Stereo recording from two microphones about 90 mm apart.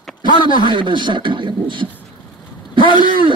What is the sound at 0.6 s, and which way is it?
Speech, 60° right (ahead or behind).